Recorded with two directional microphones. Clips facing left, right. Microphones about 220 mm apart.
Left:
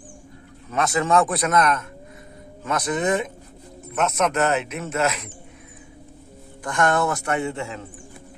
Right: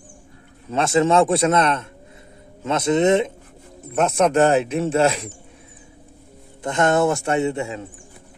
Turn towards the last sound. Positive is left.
turn(degrees=-20)  # may be behind; listen again after turning